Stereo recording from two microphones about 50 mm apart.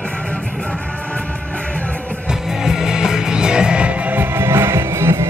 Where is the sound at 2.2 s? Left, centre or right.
Centre; by 4.2 s right.